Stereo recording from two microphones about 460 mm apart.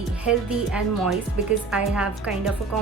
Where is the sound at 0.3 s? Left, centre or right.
Centre.